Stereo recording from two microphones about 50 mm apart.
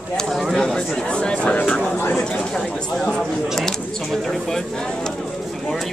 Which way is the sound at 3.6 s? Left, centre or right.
Centre.